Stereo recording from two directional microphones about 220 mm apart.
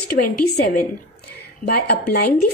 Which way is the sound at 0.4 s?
40° left (ahead or behind).